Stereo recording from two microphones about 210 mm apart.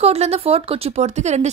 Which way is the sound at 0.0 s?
30° right (ahead or behind).